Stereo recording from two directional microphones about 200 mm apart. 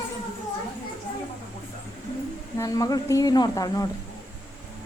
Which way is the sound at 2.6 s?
15° left (ahead or behind).